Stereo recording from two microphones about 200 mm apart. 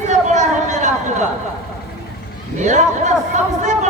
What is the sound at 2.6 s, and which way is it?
Speech, 35° right (ahead or behind).